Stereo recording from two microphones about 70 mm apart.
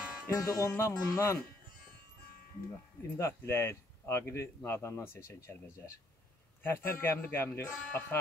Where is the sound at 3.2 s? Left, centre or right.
Left.